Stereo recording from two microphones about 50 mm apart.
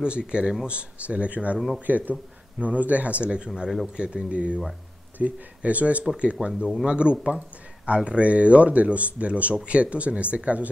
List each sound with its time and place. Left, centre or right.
0.0 s speech: centre
6.4 s speech: centre